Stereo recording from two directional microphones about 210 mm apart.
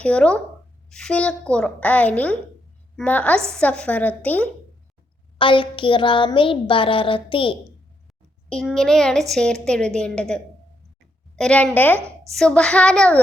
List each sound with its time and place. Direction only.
0.0 s a woman's voice: 5° left (ahead or behind)
5.4 s speech: 25° left (ahead or behind)
8.4 s a woman's voice: 5° left (ahead or behind)
11.9 s a woman's voice: 10° right (ahead or behind)
12.3 s a woman's voice: centre (ahead or behind)